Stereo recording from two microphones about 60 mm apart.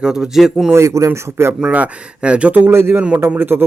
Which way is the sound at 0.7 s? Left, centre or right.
Right.